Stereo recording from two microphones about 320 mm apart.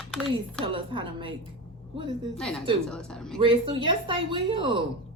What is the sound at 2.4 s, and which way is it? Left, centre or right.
Speech, centre.